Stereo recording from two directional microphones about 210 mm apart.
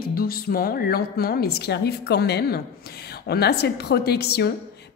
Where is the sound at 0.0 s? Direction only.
45° left (ahead or behind).